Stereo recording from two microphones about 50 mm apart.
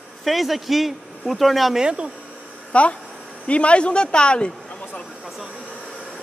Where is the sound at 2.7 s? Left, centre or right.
Left.